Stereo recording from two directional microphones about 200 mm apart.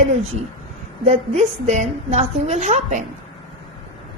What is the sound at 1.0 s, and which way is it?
A woman's voice, 35° right (ahead or behind).